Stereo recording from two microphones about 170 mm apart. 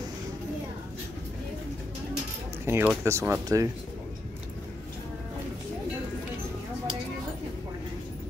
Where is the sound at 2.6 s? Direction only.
15° right (ahead or behind).